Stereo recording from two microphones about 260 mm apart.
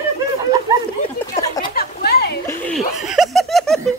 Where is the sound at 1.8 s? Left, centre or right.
Left.